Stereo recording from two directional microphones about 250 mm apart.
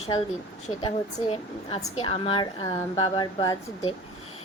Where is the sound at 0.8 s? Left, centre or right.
Left.